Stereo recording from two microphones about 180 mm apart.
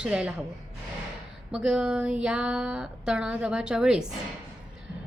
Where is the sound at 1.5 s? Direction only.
5° right (ahead or behind).